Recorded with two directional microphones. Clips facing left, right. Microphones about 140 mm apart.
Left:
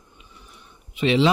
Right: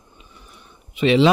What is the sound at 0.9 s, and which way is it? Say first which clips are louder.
Speech: right 4 dB; 65° right (ahead or behind).